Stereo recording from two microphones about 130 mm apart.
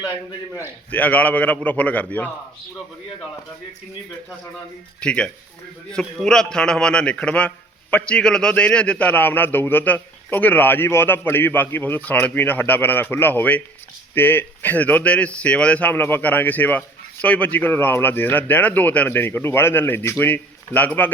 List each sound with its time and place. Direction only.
0.9 s a man's voice: 10° left (ahead or behind)
4.9 s a man's voice: 10° left (ahead or behind)